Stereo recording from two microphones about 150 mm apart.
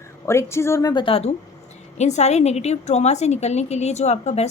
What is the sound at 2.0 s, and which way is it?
A woman's voice, 50° left (ahead or behind).